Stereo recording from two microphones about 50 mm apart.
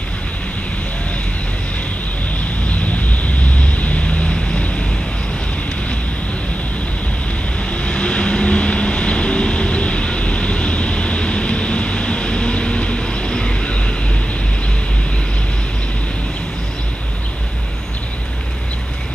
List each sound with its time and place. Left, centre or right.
3.7 s vehicle: left
7.7 s vehicle: centre